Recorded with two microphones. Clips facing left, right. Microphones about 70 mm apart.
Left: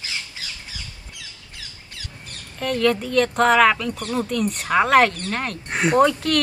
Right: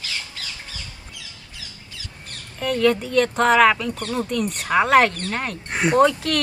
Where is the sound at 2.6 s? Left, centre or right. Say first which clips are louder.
Right 1 dB; centre.